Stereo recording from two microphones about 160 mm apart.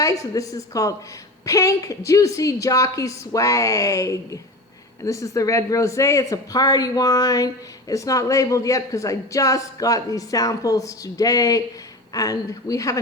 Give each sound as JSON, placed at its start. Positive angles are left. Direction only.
{"t": 0.0, "sound": "a woman's voice", "side_deg": 20}